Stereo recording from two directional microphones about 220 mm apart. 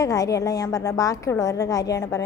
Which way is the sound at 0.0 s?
15° left (ahead or behind).